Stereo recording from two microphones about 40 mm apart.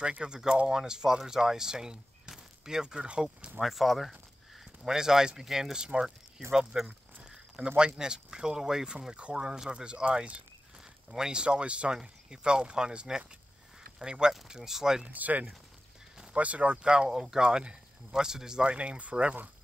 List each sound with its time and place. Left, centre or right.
0.2 s speech: centre
3.6 s speech: centre
4.8 s speech: centre
6.9 s a sound: right
7.6 s speech: right
9.1 s speech: right
14.5 s speech: centre
15.0 s speech: right
16.9 s speech: right
18.7 s speech: right